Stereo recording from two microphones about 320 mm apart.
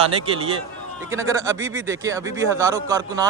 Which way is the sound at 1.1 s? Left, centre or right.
Centre.